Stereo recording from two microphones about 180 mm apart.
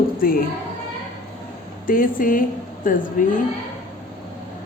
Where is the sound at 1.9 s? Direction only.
50° left (ahead or behind).